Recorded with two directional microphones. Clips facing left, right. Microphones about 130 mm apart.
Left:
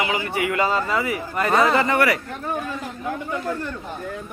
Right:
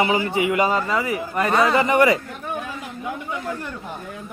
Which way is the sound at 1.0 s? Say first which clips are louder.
Right 1 dB; 25° right (ahead or behind).